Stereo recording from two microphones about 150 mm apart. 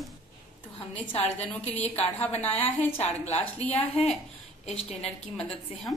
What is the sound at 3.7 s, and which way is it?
Speech, 45° left (ahead or behind).